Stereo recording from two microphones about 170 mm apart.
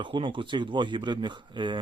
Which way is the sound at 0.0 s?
30° right (ahead or behind).